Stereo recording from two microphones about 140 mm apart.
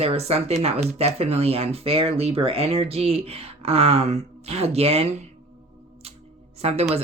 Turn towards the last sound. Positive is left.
turn(degrees=-50)  # may be behind; listen again after turning